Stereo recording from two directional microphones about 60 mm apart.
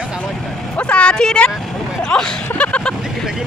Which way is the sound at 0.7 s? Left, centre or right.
Centre.